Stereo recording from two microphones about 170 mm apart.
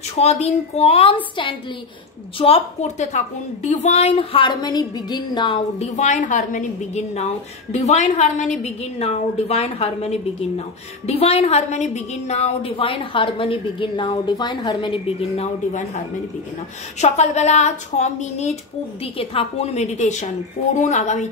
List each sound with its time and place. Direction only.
0.1 s a woman's voice: 40° left (ahead or behind)
5.8 s a woman's voice: 40° left (ahead or behind)
17.0 s a woman's voice: 40° left (ahead or behind)